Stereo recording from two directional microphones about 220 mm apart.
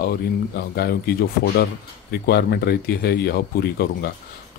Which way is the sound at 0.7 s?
45° left (ahead or behind).